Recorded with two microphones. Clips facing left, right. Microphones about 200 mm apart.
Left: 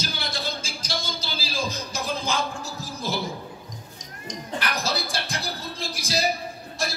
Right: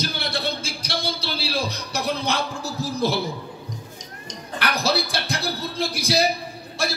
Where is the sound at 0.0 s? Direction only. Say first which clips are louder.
Right 4 dB; 65° right (ahead or behind).